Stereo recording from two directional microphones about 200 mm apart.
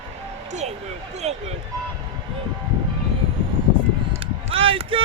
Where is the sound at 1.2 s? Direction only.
35° right (ahead or behind).